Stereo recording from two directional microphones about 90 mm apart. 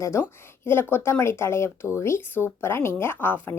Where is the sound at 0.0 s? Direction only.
30° left (ahead or behind).